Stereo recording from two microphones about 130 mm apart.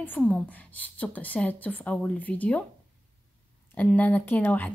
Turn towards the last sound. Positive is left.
turn(degrees=15)  # may be behind; listen again after turning